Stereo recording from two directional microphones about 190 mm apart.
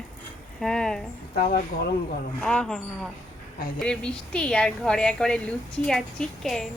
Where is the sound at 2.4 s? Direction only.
5° left (ahead or behind).